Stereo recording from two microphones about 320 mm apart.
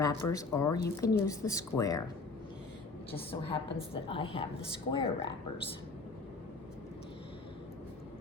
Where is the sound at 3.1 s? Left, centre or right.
Centre.